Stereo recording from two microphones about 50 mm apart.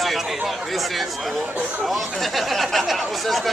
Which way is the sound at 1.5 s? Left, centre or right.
Right.